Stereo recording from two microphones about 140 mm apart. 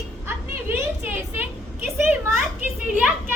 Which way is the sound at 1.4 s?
15° right (ahead or behind).